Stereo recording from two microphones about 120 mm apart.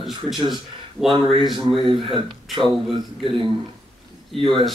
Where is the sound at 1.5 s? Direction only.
45° right (ahead or behind).